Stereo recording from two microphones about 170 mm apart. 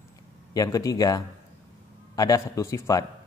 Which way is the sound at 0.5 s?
20° left (ahead or behind).